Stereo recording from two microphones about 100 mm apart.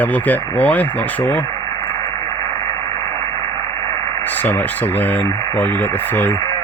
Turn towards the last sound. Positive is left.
turn(degrees=15)  # may be behind; listen again after turning